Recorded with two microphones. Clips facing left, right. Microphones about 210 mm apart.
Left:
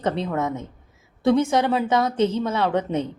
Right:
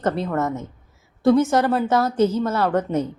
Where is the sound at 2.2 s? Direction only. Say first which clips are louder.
Right 2 dB; 30° left (ahead or behind).